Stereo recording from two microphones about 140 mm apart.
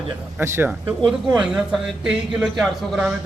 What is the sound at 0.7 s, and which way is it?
Speech, 5° right (ahead or behind).